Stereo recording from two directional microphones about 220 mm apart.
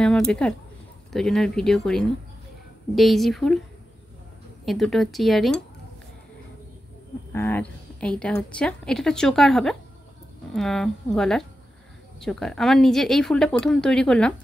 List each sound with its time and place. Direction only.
0.0 s speech: 5° left (ahead or behind)
4.6 s speech: centre (ahead or behind)
7.3 s speech: 10° left (ahead or behind)